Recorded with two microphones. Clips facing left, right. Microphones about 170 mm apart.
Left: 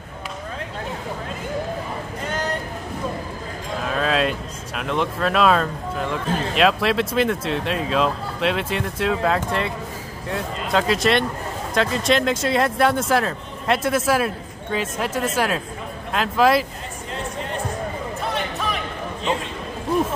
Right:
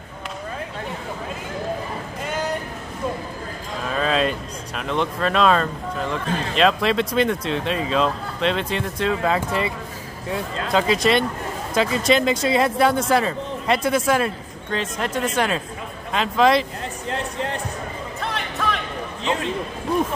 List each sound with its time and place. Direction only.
3.9 s speech: centre (ahead or behind)